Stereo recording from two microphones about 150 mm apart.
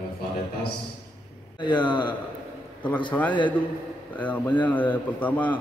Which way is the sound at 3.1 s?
10° left (ahead or behind).